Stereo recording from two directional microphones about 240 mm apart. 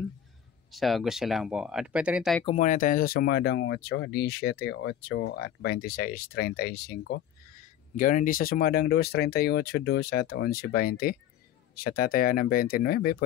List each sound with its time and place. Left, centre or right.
0.7 s speech: centre
2.4 s speech: left